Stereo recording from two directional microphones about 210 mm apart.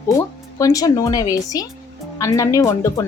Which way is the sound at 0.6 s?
15° left (ahead or behind).